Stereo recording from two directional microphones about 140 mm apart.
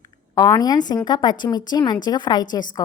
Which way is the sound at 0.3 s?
25° left (ahead or behind).